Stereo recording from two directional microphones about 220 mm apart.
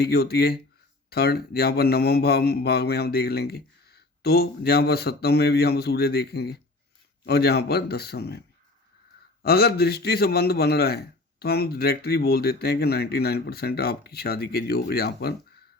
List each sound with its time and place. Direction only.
0.0 s a man's voice: 45° left (ahead or behind)